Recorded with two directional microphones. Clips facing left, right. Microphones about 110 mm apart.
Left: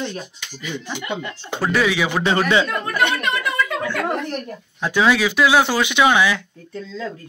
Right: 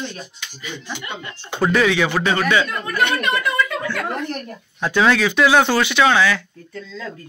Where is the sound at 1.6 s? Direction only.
Centre (ahead or behind).